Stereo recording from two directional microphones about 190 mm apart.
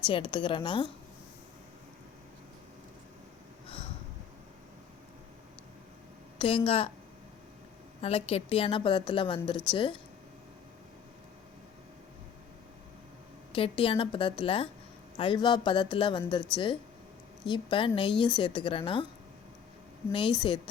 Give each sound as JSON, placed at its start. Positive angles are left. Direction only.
{"t": 0.0, "sound": "a woman's voice", "side_deg": 25}
{"t": 6.4, "sound": "a woman's voice", "side_deg": 30}
{"t": 8.0, "sound": "a woman's voice", "side_deg": 30}
{"t": 13.5, "sound": "a woman's voice", "side_deg": 30}
{"t": 20.1, "sound": "a woman's voice", "side_deg": 25}